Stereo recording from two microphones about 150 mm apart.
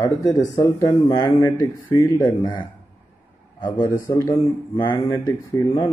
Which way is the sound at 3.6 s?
25° left (ahead or behind).